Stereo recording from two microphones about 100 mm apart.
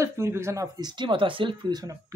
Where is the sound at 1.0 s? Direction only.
55° right (ahead or behind).